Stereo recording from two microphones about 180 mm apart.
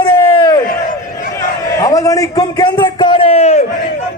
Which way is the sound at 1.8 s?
20° left (ahead or behind).